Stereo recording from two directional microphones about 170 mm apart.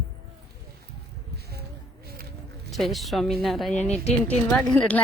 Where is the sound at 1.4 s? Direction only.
70° right (ahead or behind).